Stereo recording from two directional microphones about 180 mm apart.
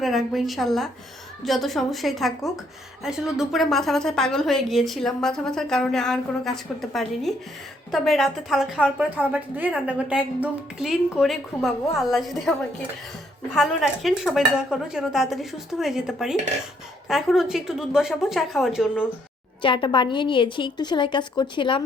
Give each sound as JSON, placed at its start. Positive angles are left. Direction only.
{"t": 0.0, "sound": "a woman's voice", "side_deg": 0}
{"t": 19.6, "sound": "a woman's voice", "side_deg": 25}